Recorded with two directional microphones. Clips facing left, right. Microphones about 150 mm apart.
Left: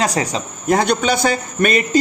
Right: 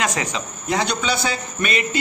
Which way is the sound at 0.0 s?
35° left (ahead or behind).